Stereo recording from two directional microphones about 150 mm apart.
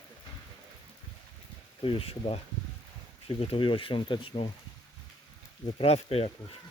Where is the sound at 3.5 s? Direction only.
35° left (ahead or behind).